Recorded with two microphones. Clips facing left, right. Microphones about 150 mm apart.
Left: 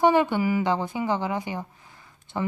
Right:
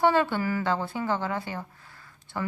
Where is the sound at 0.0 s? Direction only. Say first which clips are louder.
Left 3 dB; 15° left (ahead or behind).